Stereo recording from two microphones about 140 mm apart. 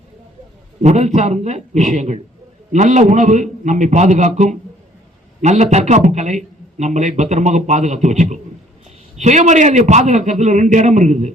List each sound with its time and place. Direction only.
0.8 s a man's voice: 55° right (ahead or behind)